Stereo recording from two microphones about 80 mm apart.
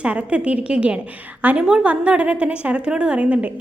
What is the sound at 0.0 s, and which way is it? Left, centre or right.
A woman's voice, centre.